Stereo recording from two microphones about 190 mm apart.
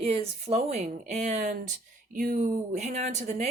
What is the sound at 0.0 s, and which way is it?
Speech, 30° right (ahead or behind).